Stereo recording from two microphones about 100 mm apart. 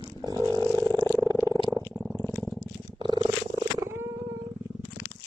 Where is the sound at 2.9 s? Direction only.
50° right (ahead or behind).